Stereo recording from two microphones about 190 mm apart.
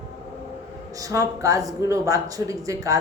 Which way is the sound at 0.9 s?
15° right (ahead or behind).